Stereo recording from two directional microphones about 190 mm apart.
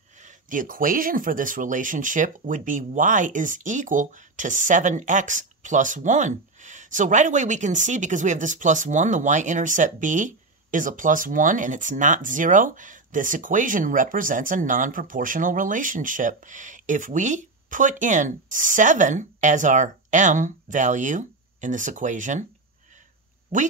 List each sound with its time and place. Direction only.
0.2 s speech: 45° right (ahead or behind)
23.5 s speech: 45° right (ahead or behind)